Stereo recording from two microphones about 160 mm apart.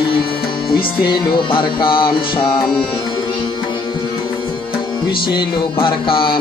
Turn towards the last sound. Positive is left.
turn(degrees=30)  # may be behind; listen again after turning